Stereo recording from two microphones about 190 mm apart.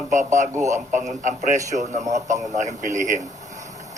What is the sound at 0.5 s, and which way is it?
Speech, 15° right (ahead or behind).